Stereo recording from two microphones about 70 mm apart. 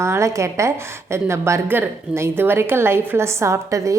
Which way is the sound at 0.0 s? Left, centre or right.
Right.